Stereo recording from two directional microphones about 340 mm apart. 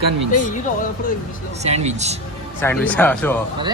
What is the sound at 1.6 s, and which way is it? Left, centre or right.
Speech, centre.